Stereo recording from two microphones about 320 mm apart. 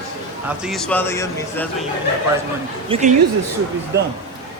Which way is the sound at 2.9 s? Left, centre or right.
Centre.